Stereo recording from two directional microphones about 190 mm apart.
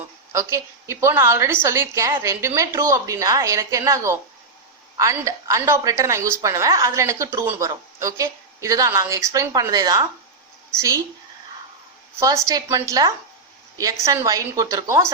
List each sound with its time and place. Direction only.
0.3 s a woman's voice: 15° right (ahead or behind)
12.2 s a woman's voice: 15° right (ahead or behind)